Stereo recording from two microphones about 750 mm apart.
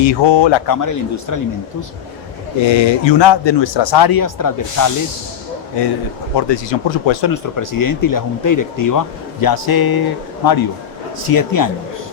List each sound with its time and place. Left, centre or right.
0.0 s a man's voice: left
2.6 s a man's voice: left
6.3 s speech: left